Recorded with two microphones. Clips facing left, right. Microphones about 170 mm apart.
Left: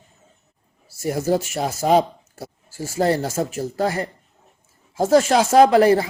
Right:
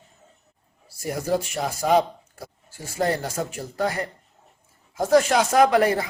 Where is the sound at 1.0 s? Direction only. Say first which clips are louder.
Left 4 dB; 30° left (ahead or behind).